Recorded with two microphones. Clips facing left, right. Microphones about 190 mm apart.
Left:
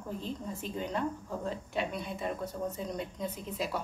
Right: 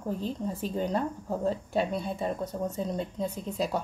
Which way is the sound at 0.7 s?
35° right (ahead or behind).